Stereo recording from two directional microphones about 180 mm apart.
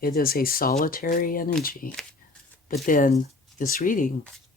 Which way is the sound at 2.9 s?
50° left (ahead or behind).